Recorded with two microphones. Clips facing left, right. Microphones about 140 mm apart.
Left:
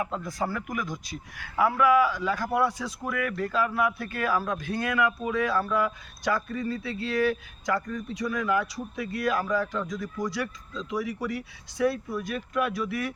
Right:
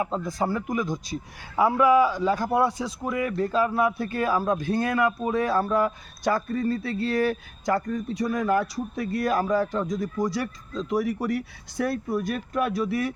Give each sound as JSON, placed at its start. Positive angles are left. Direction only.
{"t": 0.0, "sound": "speech", "side_deg": -25}